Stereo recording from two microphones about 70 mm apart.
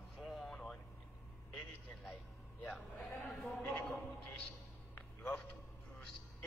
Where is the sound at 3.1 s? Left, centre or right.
Left.